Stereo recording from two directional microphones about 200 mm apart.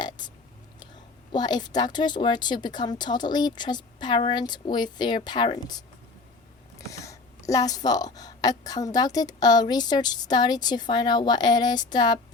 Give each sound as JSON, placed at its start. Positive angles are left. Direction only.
{"t": 1.3, "sound": "speech", "side_deg": 20}
{"t": 6.7, "sound": "speech", "side_deg": 15}